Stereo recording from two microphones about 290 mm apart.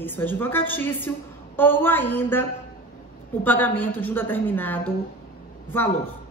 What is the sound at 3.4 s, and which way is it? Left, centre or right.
A woman's voice, centre.